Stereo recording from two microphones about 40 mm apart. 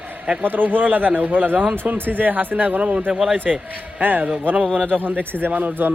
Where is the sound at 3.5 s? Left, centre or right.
Centre.